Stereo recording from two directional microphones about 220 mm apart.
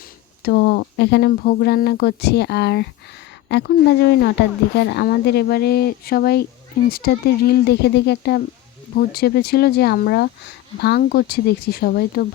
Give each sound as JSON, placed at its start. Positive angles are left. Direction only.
{"t": 0.4, "sound": "speech", "side_deg": 50}